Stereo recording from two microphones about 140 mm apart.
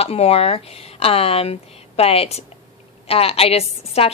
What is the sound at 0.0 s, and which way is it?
A woman's voice, 45° left (ahead or behind).